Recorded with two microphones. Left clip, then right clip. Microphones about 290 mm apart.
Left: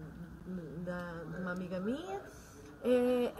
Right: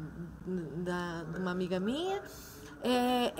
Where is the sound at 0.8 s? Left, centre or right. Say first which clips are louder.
Right 3 dB; right.